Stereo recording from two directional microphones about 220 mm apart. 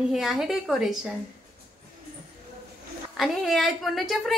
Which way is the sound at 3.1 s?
Centre (ahead or behind).